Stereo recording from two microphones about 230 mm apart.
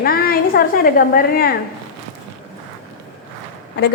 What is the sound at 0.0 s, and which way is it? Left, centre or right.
A woman's voice, left.